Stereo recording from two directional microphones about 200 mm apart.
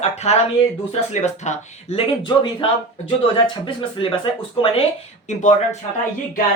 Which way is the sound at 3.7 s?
25° left (ahead or behind).